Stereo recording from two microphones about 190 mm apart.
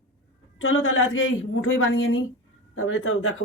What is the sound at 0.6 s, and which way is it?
A woman's voice, 90° left.